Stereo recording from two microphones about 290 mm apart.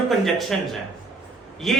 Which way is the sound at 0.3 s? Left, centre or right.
Centre.